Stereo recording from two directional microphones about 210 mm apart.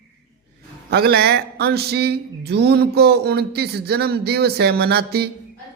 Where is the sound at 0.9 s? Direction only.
50° right (ahead or behind).